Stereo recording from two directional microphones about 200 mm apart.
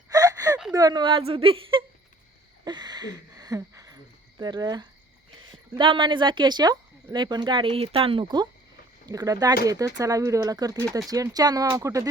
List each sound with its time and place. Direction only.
0.1 s gasp: 20° right (ahead or behind)
0.7 s speech: 20° right (ahead or behind)